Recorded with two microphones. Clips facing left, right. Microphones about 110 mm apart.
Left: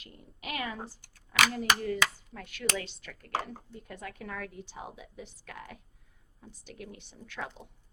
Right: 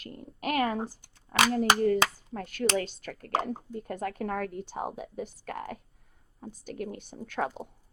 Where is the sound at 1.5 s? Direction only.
40° right (ahead or behind).